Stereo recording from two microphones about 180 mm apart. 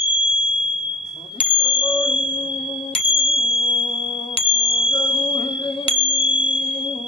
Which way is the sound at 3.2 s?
30° left (ahead or behind).